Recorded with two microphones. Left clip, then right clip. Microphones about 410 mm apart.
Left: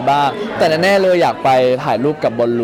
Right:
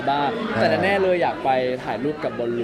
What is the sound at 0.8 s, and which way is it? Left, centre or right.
Speech, left.